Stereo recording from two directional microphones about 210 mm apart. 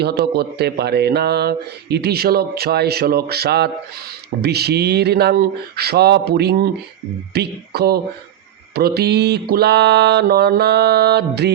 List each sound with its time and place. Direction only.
0.0 s speech: 50° right (ahead or behind)